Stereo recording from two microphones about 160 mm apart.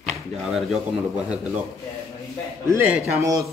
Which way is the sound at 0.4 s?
Centre (ahead or behind).